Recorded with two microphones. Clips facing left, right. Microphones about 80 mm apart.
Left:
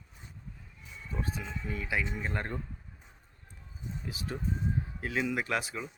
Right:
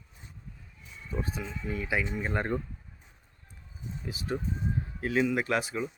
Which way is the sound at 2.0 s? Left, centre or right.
Centre.